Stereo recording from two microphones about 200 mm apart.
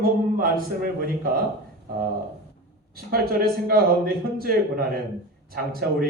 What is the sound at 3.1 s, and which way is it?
A man's voice, 50° right (ahead or behind).